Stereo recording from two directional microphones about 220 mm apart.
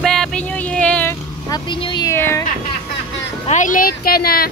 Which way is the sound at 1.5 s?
20° left (ahead or behind).